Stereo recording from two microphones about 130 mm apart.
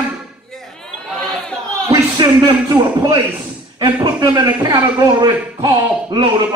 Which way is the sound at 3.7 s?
40° right (ahead or behind).